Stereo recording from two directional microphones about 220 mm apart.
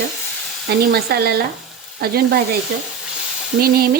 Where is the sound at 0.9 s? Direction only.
45° right (ahead or behind).